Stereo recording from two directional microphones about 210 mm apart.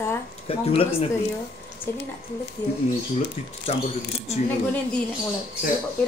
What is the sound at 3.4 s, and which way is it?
Speech, 35° left (ahead or behind).